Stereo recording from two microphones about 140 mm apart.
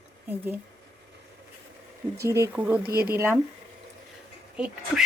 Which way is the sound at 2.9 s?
90° right.